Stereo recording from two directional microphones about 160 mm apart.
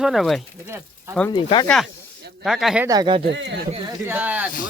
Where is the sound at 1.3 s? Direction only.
30° left (ahead or behind).